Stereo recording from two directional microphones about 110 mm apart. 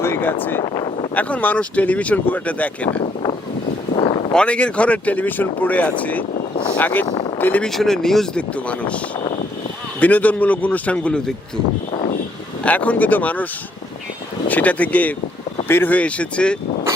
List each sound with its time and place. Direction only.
0.0 s a sound: 20° left (ahead or behind)
0.6 s speech: 50° left (ahead or behind)
1.1 s speech: 15° left (ahead or behind)
3.9 s a sound: 50° left (ahead or behind)
4.3 s speech: 10° left (ahead or behind)
7.7 s speech: 5° left (ahead or behind)
10.0 s speech: 15° left (ahead or behind)
12.6 s speech: 15° left (ahead or behind)